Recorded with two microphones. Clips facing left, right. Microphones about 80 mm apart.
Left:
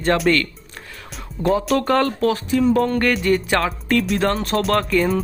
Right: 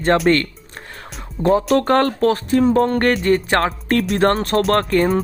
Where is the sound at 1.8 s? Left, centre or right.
Right.